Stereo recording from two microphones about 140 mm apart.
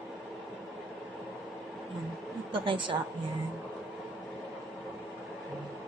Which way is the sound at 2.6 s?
35° right (ahead or behind).